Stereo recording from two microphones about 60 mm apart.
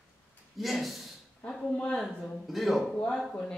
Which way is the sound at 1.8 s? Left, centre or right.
Centre.